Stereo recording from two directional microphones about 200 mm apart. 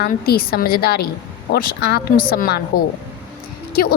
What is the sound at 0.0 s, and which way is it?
A woman's voice, 50° left (ahead or behind).